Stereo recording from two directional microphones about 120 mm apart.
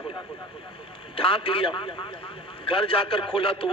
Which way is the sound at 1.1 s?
50° left (ahead or behind).